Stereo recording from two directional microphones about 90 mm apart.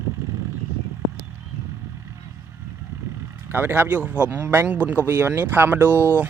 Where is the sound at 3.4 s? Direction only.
25° right (ahead or behind).